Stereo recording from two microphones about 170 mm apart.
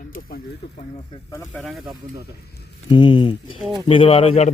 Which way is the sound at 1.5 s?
Centre (ahead or behind).